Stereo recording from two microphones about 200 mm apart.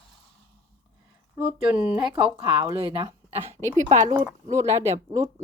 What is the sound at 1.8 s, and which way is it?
Speech, 5° right (ahead or behind).